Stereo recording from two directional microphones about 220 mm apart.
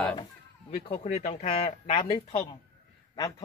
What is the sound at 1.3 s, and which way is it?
Speech, 30° left (ahead or behind).